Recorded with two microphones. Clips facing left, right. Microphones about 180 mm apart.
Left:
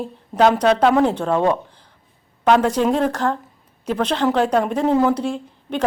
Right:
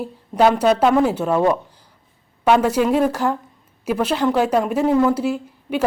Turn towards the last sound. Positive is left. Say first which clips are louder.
# right 1 dB
turn(degrees=-5)  # may be behind; listen again after turning